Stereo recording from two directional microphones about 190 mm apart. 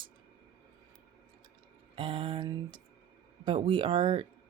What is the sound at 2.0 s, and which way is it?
Speech, 30° right (ahead or behind).